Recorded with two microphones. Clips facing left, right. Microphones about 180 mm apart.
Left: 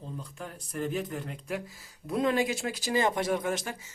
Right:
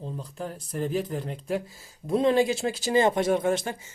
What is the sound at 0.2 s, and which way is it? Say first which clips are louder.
Speech: right 6 dB; 35° right (ahead or behind).